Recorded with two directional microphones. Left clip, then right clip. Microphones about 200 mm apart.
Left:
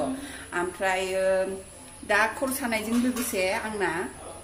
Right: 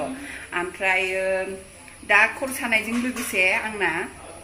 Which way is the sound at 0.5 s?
10° left (ahead or behind).